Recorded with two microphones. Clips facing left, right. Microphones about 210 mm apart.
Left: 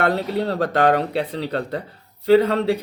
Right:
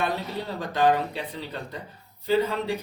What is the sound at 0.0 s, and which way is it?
Speech, 70° left (ahead or behind).